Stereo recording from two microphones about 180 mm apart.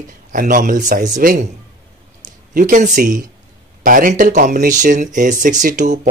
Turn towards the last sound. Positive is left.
turn(degrees=-45)  # may be behind; listen again after turning